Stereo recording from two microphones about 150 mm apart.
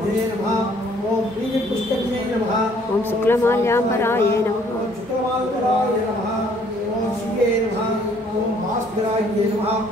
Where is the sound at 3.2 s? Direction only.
15° left (ahead or behind).